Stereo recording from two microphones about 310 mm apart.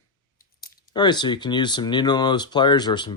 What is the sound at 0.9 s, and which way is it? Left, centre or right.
Speech, centre.